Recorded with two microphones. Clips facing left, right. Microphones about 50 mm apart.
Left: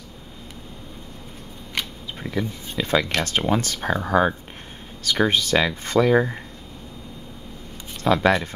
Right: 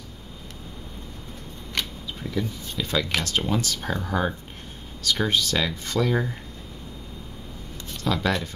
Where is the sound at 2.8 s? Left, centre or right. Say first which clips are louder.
Left 4 dB; left.